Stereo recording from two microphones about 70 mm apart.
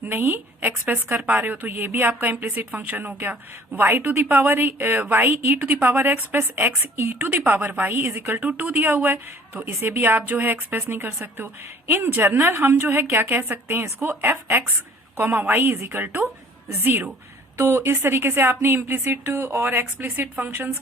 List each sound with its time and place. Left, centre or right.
0.0 s a woman's voice: right